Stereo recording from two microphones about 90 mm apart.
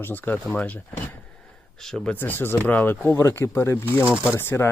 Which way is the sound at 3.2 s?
35° left (ahead or behind).